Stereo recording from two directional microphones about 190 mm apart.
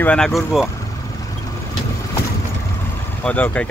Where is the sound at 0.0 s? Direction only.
5° left (ahead or behind).